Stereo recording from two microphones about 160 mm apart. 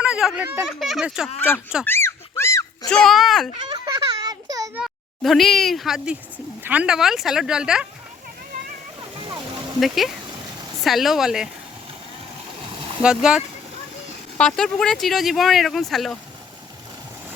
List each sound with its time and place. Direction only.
0.0 s speech: 5° right (ahead or behind)
1.8 s a sound: 15° left (ahead or behind)
2.9 s speech: centre (ahead or behind)
3.7 s a sound: 30° right (ahead or behind)
4.7 s speech: centre (ahead or behind)
9.0 s splash: 30° right (ahead or behind)
9.8 s speech: centre (ahead or behind)
10.2 s a sound: 25° right (ahead or behind)
10.8 s speech: centre (ahead or behind)
13.0 s speech: 5° right (ahead or behind)